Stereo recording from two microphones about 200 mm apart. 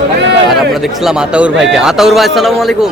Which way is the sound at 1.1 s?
5° right (ahead or behind).